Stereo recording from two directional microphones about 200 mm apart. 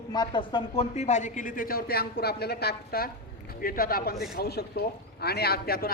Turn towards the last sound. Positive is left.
turn(degrees=50)  # may be behind; listen again after turning